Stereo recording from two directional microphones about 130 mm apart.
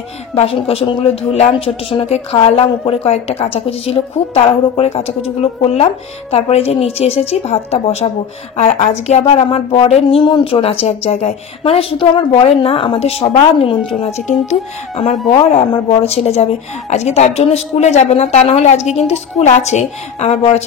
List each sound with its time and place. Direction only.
0.4 s a woman's voice: 50° left (ahead or behind)
9.2 s speech: 45° left (ahead or behind)
14.2 s a woman's voice: 60° left (ahead or behind)